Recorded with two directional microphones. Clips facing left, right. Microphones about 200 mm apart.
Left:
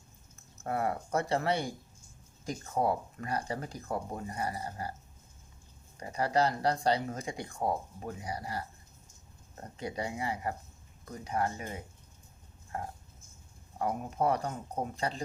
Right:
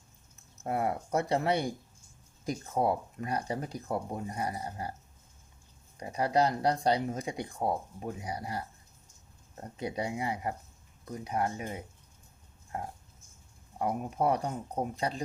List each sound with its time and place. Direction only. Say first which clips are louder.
0.6 s speech: right 1 dB; 15° right (ahead or behind)
6.0 s speech: right 1 dB; 15° right (ahead or behind)
9.7 s speech: right 2 dB; 15° right (ahead or behind)